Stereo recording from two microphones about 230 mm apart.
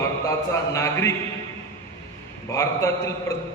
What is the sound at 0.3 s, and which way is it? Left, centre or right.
Speech, centre.